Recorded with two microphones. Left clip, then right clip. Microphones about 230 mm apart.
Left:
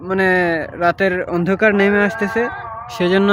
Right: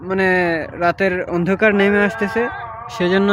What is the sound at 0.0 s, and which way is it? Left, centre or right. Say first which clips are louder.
Speech: left 1 dB; centre.